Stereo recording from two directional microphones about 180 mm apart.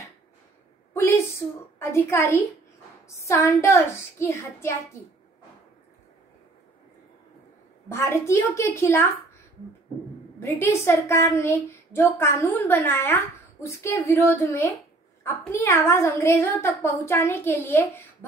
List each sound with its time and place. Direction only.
0.9 s a sound: 15° left (ahead or behind)
1.8 s a woman's voice: 15° left (ahead or behind)
7.9 s a woman's voice: 15° left (ahead or behind)
10.4 s a woman's voice: 15° left (ahead or behind)